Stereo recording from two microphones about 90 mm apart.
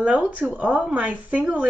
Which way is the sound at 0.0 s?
15° right (ahead or behind).